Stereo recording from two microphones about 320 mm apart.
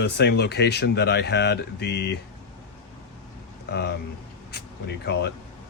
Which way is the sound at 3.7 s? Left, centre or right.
Left.